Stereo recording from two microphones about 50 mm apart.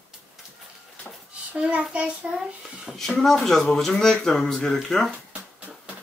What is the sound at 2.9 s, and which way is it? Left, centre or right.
Speech, centre.